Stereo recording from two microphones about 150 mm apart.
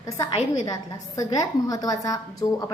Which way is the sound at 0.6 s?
25° left (ahead or behind).